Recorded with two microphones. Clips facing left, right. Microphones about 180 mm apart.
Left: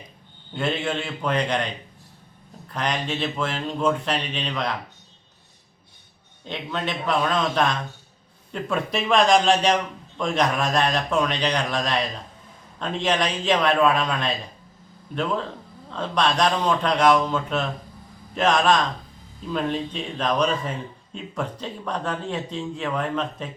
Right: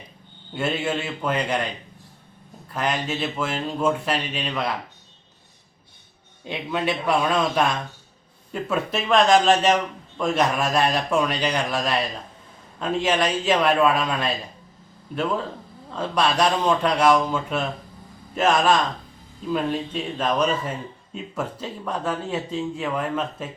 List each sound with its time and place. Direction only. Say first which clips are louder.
0.5 s a man's voice: right 1 dB; 10° right (ahead or behind)
2.7 s a man's voice: right 1 dB; 5° right (ahead or behind)
6.4 s a man's voice: right 3 dB; 10° right (ahead or behind)